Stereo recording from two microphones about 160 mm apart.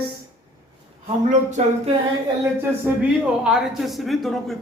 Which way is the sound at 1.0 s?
45° right (ahead or behind).